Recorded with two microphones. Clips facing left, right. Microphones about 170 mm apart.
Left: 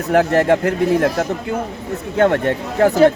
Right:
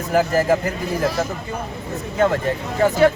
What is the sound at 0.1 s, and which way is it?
Speech, 65° left (ahead or behind).